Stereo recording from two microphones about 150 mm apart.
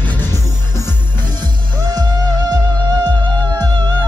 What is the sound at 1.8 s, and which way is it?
Music, 25° right (ahead or behind).